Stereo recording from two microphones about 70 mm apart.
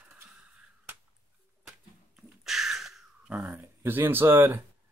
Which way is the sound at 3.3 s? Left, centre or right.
Centre.